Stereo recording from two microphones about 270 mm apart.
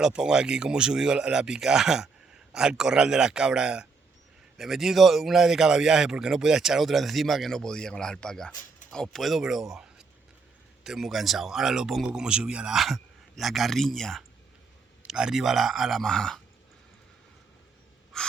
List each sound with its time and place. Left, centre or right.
0.0 s a man's voice: centre